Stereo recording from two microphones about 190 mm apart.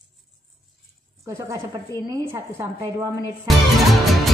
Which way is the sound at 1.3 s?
20° right (ahead or behind).